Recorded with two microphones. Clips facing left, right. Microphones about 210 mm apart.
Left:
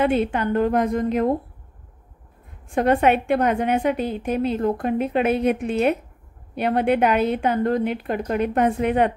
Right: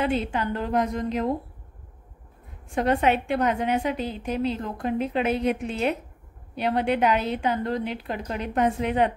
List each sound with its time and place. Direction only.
0.0 s a woman's voice: 55° left (ahead or behind)
2.7 s a woman's voice: 55° left (ahead or behind)